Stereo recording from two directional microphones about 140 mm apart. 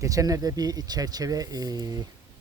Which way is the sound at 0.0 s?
25° right (ahead or behind).